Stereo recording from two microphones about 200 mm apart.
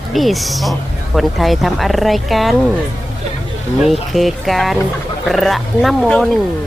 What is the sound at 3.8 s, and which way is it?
Speech, centre (ahead or behind).